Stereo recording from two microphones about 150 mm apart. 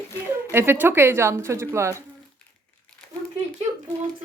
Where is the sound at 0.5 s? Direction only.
15° right (ahead or behind).